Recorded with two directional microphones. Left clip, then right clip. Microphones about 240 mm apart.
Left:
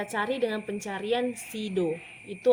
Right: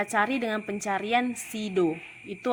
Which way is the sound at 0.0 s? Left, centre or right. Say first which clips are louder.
Right 2 dB; right.